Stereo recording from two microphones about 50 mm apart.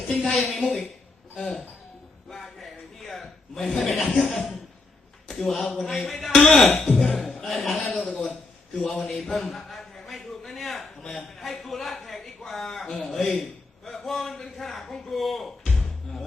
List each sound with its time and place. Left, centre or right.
0.1 s speech: centre
2.3 s chuckle: centre
5.3 s a man's voice: centre